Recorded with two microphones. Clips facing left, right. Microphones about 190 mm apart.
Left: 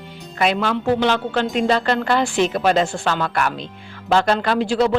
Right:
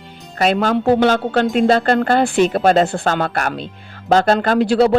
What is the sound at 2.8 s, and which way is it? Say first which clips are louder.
A woman's voice: right 3 dB; 55° right (ahead or behind).